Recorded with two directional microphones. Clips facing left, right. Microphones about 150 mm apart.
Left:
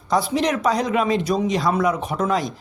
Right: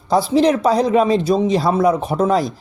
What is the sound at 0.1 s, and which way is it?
Speech, 30° right (ahead or behind).